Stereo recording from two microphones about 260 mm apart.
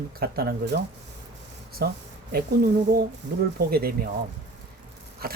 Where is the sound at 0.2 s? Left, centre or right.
Right.